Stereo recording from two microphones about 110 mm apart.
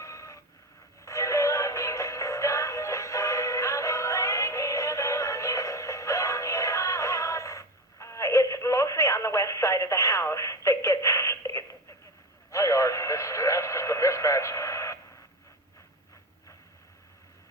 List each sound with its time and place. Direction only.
0.0 s vehicle: 30° left (ahead or behind)
1.0 s synthetic singing: 25° left (ahead or behind)
12.5 s radio: 25° left (ahead or behind)